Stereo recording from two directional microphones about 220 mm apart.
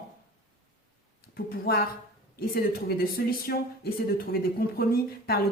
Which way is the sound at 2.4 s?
45° left (ahead or behind).